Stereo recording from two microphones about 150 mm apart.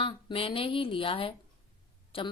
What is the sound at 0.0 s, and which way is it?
A woman's voice, 35° left (ahead or behind).